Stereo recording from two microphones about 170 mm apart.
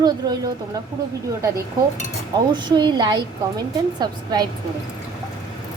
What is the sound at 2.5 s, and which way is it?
A woman's voice, 25° right (ahead or behind).